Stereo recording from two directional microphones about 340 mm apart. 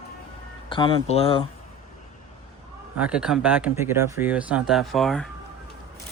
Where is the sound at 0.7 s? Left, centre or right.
Centre.